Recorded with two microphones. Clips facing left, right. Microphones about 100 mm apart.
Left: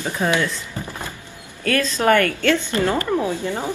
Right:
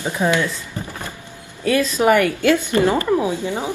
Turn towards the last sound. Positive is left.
turn(degrees=-15)  # may be behind; listen again after turning